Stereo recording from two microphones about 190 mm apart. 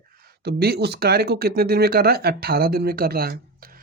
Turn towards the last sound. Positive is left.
turn(degrees=-50)  # may be behind; listen again after turning